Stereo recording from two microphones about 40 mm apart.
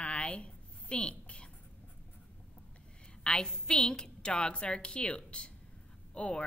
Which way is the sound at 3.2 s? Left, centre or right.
Left.